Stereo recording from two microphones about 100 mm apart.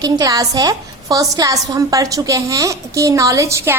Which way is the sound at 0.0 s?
40° right (ahead or behind).